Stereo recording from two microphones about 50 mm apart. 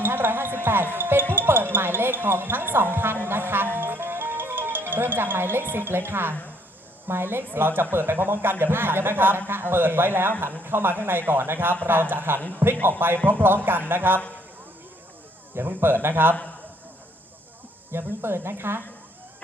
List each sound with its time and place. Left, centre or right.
0.0 s music: right
0.6 s basketball bounce: right
0.9 s music: right
1.3 s a man's voice: right
15.5 s a man's voice: right
17.9 s speech: right